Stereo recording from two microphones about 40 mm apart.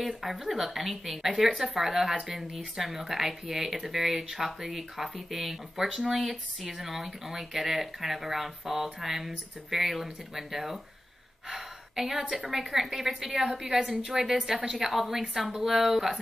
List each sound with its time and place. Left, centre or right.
0.0 s a woman's voice: centre